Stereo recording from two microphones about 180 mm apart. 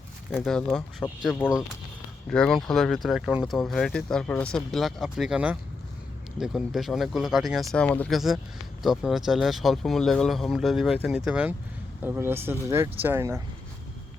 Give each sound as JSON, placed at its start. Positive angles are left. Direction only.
{"t": 0.3, "sound": "speech", "side_deg": 0}